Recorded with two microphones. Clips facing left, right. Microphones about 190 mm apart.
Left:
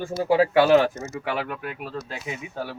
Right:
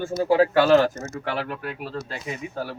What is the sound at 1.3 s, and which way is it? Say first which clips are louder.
Speech: even; 10° left (ahead or behind).